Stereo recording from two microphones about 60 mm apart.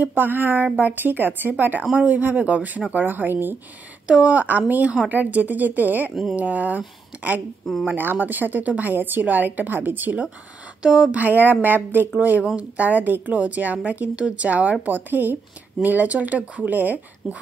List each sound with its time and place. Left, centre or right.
0.0 s a woman's voice: right
4.1 s a woman's voice: right
7.8 s a woman's voice: right
10.8 s speech: centre
11.1 s a woman's voice: right